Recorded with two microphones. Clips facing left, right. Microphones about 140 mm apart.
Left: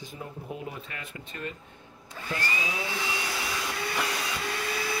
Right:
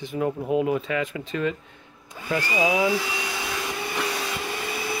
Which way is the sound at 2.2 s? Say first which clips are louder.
Right 2 dB; 10° right (ahead or behind).